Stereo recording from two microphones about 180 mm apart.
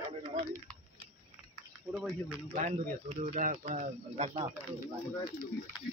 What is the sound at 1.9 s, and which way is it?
Speech, 5° right (ahead or behind).